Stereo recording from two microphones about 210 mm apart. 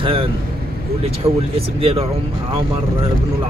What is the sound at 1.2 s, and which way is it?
Speech, 15° right (ahead or behind).